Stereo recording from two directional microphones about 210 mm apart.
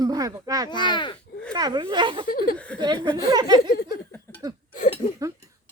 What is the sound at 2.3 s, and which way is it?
Speech, 45° left (ahead or behind).